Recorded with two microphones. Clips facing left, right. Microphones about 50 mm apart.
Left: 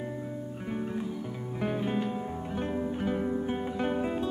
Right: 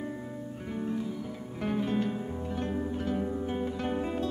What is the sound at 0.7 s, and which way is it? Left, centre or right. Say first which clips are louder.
Music: right 1 dB; centre.